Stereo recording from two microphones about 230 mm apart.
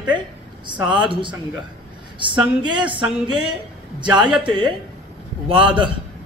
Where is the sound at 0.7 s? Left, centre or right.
Centre.